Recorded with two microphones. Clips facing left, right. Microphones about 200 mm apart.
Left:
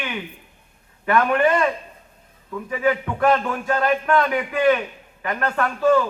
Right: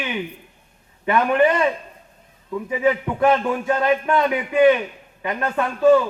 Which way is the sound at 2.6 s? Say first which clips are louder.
Right 1 dB; 20° right (ahead or behind).